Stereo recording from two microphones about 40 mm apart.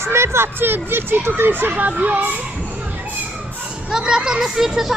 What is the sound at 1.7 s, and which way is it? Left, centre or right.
Speech, right.